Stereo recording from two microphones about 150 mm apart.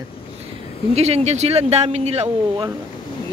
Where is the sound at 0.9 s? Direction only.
45° right (ahead or behind).